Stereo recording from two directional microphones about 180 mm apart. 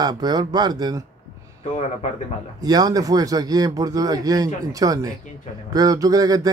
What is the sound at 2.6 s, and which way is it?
Speech, 20° right (ahead or behind).